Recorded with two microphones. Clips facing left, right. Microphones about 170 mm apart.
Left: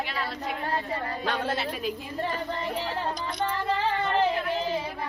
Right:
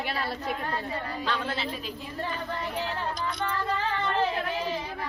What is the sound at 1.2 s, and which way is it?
Speech, 50° left (ahead or behind).